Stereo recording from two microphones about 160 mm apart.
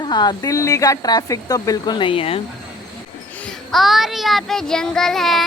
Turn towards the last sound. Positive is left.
turn(degrees=0)  # may be behind; listen again after turning